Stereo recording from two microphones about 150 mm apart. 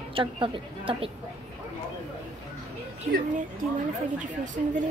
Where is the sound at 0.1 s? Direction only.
35° right (ahead or behind).